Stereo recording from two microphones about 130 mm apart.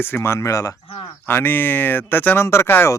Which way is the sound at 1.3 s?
15° left (ahead or behind).